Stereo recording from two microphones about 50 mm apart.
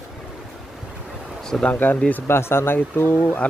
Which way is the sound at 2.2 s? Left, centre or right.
Left.